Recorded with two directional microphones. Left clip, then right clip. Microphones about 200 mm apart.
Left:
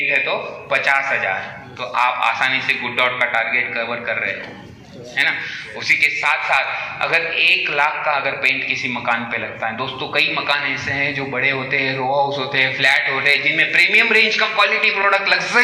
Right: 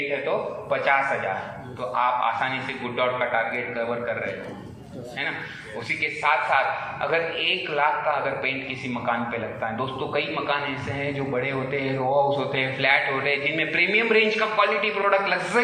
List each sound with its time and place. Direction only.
0.3 s a man's voice: 55° right (ahead or behind)